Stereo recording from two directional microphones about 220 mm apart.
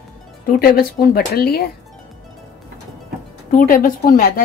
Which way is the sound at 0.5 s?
40° left (ahead or behind).